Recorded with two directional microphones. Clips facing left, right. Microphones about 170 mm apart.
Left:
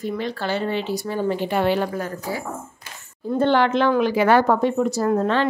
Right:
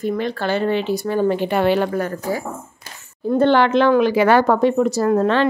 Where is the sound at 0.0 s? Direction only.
55° right (ahead or behind).